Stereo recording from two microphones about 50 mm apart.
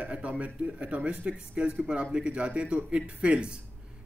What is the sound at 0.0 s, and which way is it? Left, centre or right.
Speech, right.